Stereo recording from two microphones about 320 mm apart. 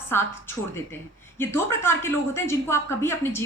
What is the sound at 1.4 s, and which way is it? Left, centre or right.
Speech, centre.